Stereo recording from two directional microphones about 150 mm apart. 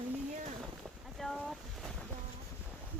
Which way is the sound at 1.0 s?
Centre (ahead or behind).